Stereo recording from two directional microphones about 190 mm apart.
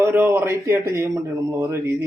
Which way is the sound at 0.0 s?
15° right (ahead or behind).